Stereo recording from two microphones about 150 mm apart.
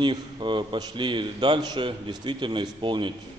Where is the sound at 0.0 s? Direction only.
30° right (ahead or behind).